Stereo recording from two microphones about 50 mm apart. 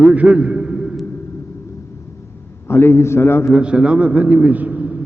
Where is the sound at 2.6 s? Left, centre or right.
Left.